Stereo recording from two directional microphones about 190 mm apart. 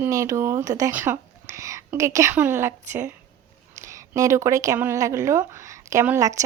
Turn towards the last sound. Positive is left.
turn(degrees=-15)  # may be behind; listen again after turning